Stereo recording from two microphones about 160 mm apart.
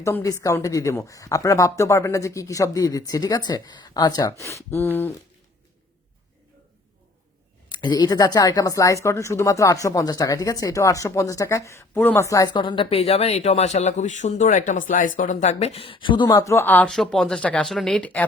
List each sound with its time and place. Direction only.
0.0 s speech: 20° left (ahead or behind)
7.7 s speech: 25° left (ahead or behind)
12.5 s speech: 30° left (ahead or behind); by 18.3 s 10° left (ahead or behind)